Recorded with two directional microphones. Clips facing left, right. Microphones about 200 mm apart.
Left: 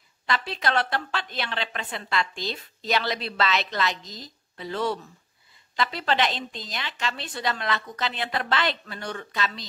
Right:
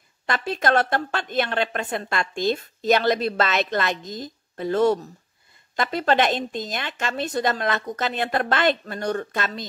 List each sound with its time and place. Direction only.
0.3 s a woman's voice: 50° right (ahead or behind)